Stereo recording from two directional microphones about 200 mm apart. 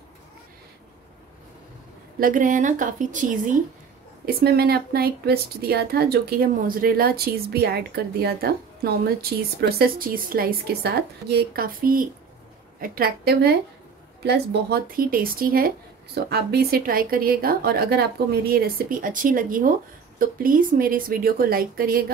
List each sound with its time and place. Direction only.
2.1 s a woman's voice: 40° right (ahead or behind)
4.3 s speech: 50° right (ahead or behind)